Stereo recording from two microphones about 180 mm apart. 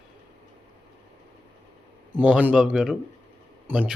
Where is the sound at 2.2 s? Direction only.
10° right (ahead or behind).